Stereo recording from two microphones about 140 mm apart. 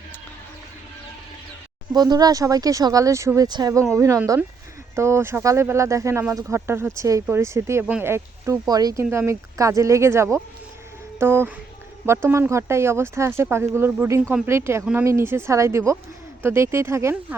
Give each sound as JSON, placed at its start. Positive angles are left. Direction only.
{"t": 1.9, "sound": "speech", "side_deg": -30}